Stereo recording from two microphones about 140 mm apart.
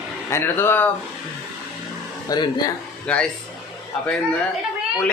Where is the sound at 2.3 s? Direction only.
30° left (ahead or behind).